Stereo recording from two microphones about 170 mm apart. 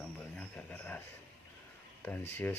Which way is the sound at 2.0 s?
10° left (ahead or behind).